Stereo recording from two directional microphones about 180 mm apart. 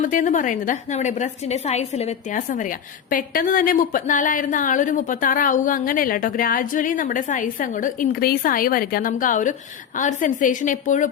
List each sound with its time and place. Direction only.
0.0 s a woman's voice: 45° left (ahead or behind)